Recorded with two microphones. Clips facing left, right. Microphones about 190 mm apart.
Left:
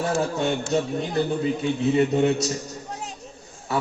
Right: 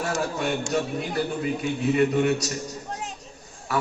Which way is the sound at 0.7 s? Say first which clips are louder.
Left 3 dB; 25° left (ahead or behind).